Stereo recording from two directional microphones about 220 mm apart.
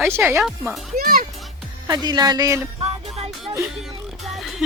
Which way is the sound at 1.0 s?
40° right (ahead or behind).